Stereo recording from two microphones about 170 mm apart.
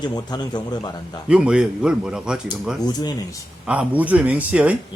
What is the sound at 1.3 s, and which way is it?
Speech, 5° right (ahead or behind).